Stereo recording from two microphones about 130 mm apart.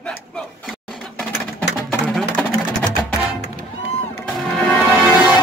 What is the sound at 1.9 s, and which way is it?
Music, 5° left (ahead or behind).